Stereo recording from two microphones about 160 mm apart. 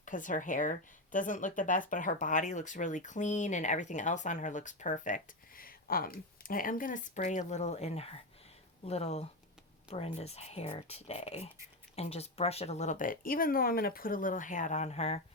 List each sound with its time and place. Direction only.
0.0 s speech: 55° left (ahead or behind)